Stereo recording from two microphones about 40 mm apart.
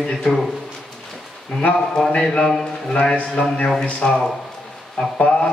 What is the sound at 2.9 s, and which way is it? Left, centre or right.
Speech, left.